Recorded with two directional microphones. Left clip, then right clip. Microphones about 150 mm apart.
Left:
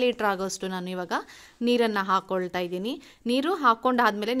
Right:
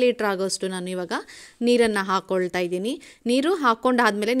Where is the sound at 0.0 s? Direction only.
30° right (ahead or behind).